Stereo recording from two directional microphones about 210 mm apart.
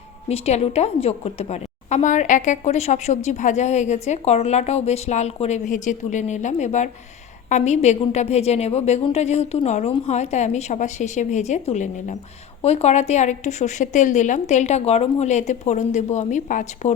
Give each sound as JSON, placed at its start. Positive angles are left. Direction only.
{"t": 0.3, "sound": "a woman's voice", "side_deg": 30}